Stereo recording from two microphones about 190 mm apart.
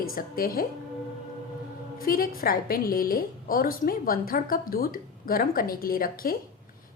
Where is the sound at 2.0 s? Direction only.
50° left (ahead or behind).